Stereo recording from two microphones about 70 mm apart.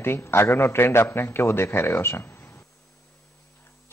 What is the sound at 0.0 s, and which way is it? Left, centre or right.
A man's voice, left.